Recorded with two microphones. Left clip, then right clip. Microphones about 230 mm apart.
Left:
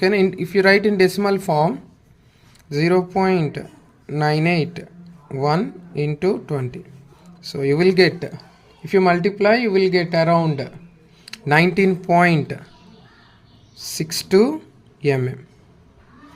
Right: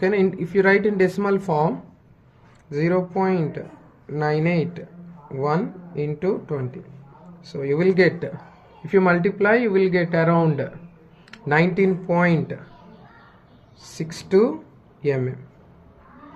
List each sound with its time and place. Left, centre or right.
0.0 s speech: left
11.3 s speech: left
13.8 s speech: left